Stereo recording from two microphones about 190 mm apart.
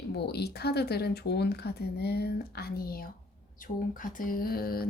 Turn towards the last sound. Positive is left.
turn(degrees=50)  # may be behind; listen again after turning